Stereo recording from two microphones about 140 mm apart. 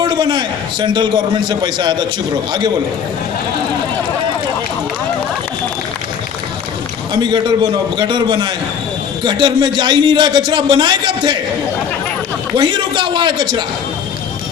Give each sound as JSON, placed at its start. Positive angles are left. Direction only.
{"t": 0.0, "sound": "a man's voice", "side_deg": -30}
{"t": 7.1, "sound": "a man's voice", "side_deg": -35}
{"t": 12.5, "sound": "a man's voice", "side_deg": -35}